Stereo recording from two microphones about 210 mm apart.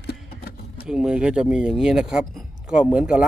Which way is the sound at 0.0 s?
50° left (ahead or behind).